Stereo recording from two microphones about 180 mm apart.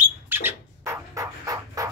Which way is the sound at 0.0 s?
10° right (ahead or behind).